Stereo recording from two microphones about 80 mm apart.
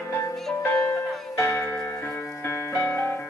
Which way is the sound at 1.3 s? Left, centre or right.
Left.